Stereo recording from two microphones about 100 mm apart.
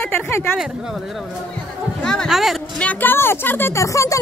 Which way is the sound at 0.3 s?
25° left (ahead or behind).